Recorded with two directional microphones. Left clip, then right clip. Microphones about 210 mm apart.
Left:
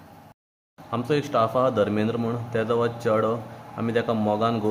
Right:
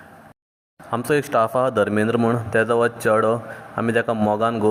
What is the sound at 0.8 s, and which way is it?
Speech, 25° right (ahead or behind).